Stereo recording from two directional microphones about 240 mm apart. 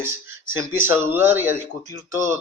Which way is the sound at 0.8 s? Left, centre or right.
Centre.